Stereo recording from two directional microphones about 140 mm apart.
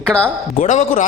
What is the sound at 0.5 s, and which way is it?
Speech, 60° left (ahead or behind).